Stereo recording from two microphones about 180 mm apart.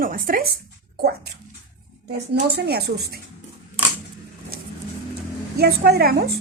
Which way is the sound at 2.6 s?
65° right (ahead or behind).